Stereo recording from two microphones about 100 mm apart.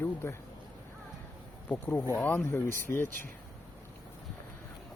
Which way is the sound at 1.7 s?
20° left (ahead or behind).